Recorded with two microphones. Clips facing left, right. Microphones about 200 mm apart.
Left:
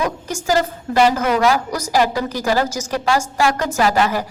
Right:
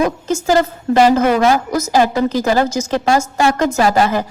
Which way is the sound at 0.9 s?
30° right (ahead or behind).